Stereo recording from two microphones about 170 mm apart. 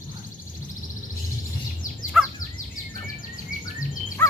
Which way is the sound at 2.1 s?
5° right (ahead or behind).